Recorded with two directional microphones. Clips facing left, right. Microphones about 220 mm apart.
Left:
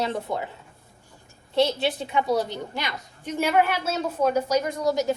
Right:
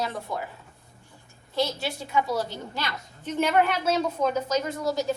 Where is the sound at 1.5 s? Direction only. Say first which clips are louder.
Left 5 dB; 25° left (ahead or behind).